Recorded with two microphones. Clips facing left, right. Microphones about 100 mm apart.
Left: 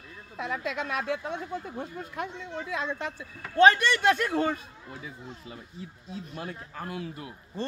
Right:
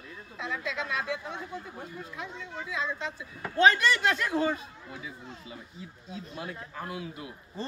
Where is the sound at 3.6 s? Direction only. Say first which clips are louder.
Left 3 dB; 45° left (ahead or behind).